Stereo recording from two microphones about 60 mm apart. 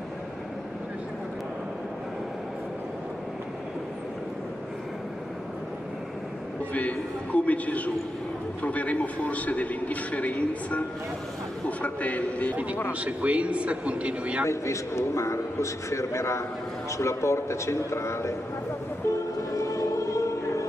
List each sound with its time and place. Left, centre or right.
6.7 s a man's voice: left
11.8 s a man's voice: left
13.0 s speech: right
14.5 s a man's voice: left
19.0 s a sound: left
19.5 s choir: left